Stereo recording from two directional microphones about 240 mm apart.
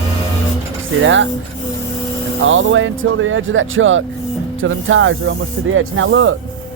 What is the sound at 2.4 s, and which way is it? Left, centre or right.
Speech, right.